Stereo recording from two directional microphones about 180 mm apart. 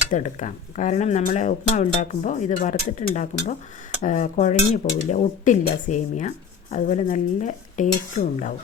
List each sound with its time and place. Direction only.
0.1 s speech: 45° left (ahead or behind)